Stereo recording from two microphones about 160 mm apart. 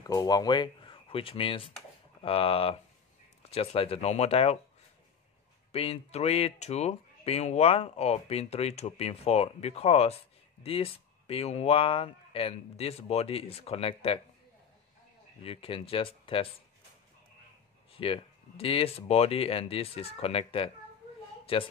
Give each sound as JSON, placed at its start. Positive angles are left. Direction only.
{"t": 0.0, "sound": "speech", "side_deg": 25}
{"t": 5.7, "sound": "speech", "side_deg": 40}
{"t": 15.4, "sound": "speech", "side_deg": 35}
{"t": 17.9, "sound": "speech", "side_deg": 35}